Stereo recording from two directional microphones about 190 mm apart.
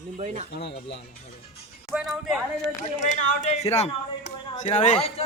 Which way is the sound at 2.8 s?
40° left (ahead or behind).